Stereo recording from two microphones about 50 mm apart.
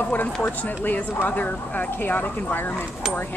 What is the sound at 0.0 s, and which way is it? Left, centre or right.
A woman's voice, left.